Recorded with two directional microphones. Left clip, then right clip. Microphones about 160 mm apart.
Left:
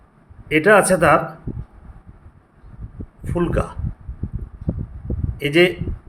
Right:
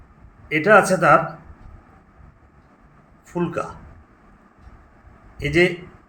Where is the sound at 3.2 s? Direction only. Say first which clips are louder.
Left 3 dB; 35° left (ahead or behind).